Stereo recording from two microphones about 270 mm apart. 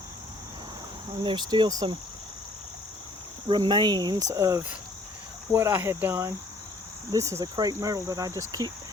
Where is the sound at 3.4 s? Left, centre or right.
Centre.